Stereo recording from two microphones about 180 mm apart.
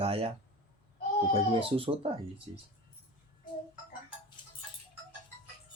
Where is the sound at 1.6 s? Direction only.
30° right (ahead or behind).